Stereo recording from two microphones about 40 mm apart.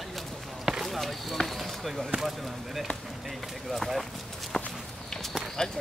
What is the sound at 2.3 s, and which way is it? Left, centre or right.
Basketball bounce, centre.